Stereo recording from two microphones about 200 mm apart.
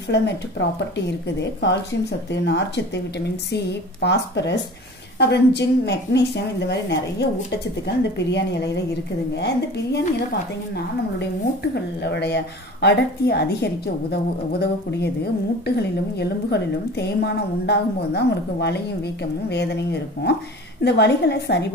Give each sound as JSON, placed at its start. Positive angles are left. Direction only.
{"t": 0.1, "sound": "a woman's voice", "side_deg": 60}
{"t": 11.7, "sound": "a woman's voice", "side_deg": 60}